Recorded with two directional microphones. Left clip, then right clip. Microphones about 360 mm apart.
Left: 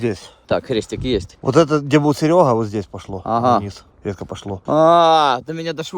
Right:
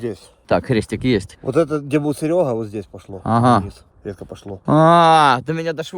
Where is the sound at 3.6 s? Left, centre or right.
Left.